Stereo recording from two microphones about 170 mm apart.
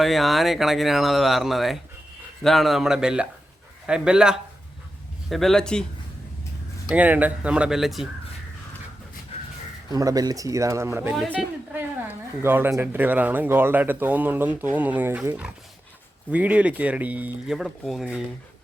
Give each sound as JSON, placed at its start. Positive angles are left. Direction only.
{"t": 0.0, "sound": "speech", "side_deg": 0}
{"t": 6.8, "sound": "speech", "side_deg": -10}
{"t": 9.9, "sound": "speech", "side_deg": -20}
{"t": 11.1, "sound": "speech", "side_deg": 0}
{"t": 11.8, "sound": "speech", "side_deg": -10}